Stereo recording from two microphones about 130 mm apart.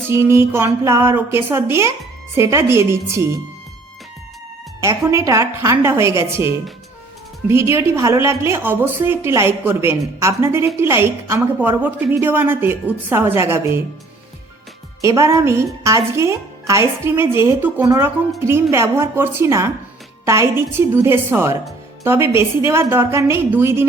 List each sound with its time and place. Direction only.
0.1 s a woman's voice: 20° right (ahead or behind)
4.8 s a woman's voice: 25° right (ahead or behind)
15.0 s a woman's voice: 25° right (ahead or behind)